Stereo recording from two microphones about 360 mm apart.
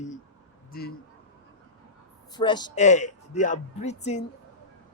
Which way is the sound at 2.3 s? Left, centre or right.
Centre.